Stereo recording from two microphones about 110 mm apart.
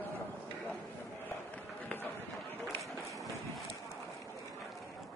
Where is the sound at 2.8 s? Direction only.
30° right (ahead or behind).